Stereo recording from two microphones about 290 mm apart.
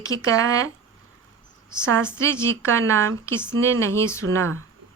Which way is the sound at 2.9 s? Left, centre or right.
Right.